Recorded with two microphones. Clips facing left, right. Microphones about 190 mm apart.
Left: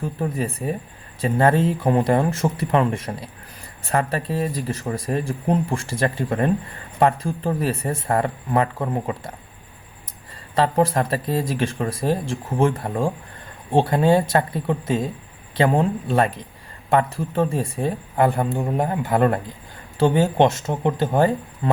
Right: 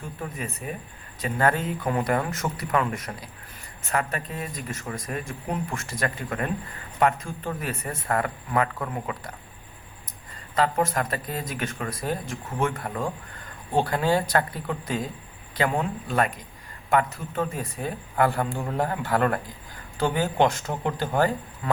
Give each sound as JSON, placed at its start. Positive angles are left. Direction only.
{"t": 0.0, "sound": "speech", "side_deg": 35}
{"t": 10.5, "sound": "speech", "side_deg": 30}